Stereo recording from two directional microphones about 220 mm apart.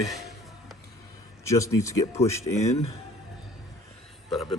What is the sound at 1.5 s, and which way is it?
Speech, 15° left (ahead or behind).